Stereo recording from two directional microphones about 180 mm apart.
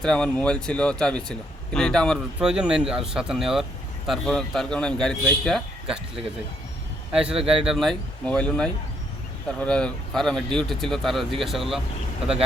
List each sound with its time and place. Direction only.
0.0 s speech: 5° left (ahead or behind)
7.3 s speech: 30° right (ahead or behind)
7.6 s speech: centre (ahead or behind)